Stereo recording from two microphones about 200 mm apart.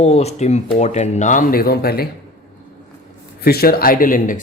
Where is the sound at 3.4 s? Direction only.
50° left (ahead or behind).